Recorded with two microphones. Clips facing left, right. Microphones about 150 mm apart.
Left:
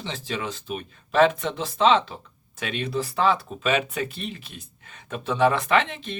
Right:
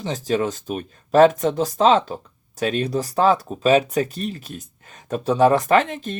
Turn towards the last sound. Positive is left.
turn(degrees=-45)  # may be behind; listen again after turning